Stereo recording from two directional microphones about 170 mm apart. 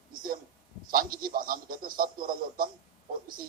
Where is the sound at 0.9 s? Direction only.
55° right (ahead or behind).